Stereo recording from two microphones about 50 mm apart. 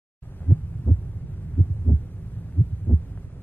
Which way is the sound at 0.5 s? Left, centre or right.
Left.